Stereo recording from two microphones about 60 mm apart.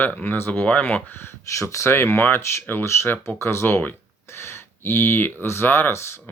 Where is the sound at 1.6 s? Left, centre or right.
Left.